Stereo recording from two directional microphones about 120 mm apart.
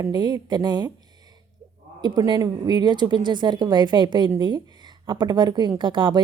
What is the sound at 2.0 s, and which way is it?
Speech, 35° right (ahead or behind).